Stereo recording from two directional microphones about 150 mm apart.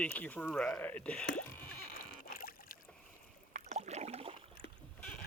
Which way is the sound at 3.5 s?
50° right (ahead or behind).